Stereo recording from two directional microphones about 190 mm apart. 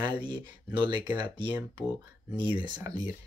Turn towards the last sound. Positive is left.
turn(degrees=-20)  # may be behind; listen again after turning